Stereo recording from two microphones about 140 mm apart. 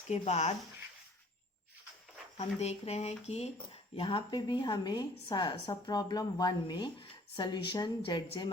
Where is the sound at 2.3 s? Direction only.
50° left (ahead or behind).